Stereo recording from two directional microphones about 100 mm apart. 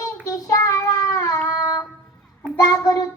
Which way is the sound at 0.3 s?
35° left (ahead or behind).